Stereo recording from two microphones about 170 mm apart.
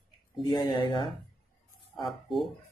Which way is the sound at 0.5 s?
30° left (ahead or behind).